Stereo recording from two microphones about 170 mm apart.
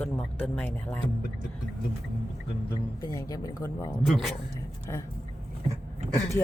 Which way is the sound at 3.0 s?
20° left (ahead or behind).